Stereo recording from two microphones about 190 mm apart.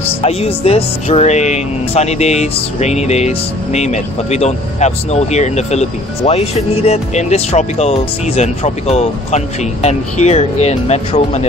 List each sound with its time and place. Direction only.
0.2 s speech: 35° left (ahead or behind)